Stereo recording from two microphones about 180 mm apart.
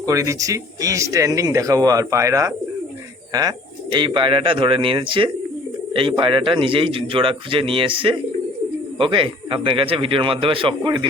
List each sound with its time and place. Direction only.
0.0 s speech: 15° right (ahead or behind)
3.9 s speech: 25° right (ahead or behind)